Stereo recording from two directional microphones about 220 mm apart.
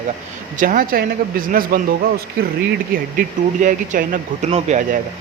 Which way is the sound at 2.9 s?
40° right (ahead or behind).